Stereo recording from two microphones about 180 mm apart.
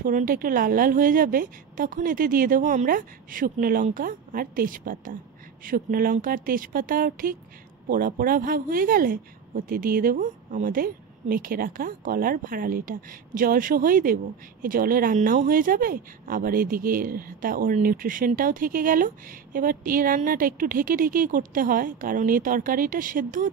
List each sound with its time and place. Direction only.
0.0 s speech: 50° right (ahead or behind)